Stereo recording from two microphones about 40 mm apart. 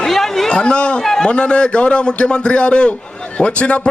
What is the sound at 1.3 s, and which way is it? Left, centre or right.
A man's voice, left.